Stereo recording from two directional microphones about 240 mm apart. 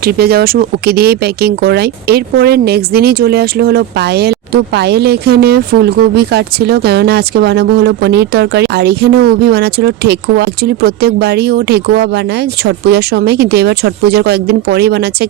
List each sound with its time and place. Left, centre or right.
0.0 s speech: right